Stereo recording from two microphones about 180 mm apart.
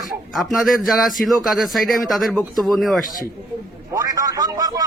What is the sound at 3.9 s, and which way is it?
Speech, 20° right (ahead or behind).